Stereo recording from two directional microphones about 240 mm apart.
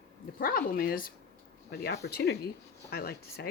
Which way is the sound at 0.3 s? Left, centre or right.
Left.